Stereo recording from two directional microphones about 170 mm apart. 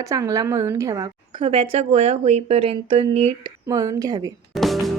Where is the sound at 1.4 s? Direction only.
35° right (ahead or behind).